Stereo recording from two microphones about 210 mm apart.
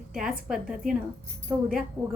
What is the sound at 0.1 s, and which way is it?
A woman's voice, centre (ahead or behind).